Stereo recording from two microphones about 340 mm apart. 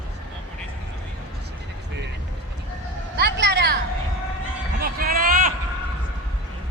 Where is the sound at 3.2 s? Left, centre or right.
Right.